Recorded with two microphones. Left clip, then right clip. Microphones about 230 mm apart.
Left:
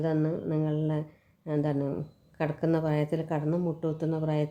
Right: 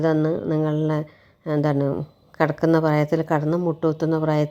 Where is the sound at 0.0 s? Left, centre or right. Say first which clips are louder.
Right 9 dB; centre.